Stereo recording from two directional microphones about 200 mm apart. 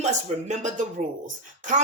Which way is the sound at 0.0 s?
35° right (ahead or behind).